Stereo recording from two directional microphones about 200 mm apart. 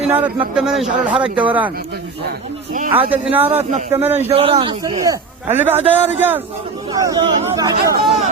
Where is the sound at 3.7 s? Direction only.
35° right (ahead or behind).